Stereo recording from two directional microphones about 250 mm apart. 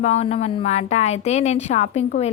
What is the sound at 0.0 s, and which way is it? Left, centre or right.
A woman's voice, left.